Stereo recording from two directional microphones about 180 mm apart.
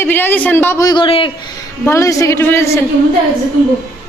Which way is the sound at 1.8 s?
15° left (ahead or behind).